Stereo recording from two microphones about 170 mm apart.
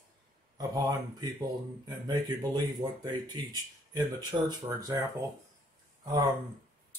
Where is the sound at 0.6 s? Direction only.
20° right (ahead or behind).